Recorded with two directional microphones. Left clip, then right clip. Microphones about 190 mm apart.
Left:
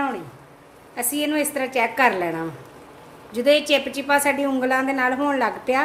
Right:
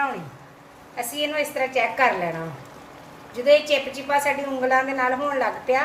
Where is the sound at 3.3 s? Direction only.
55° left (ahead or behind).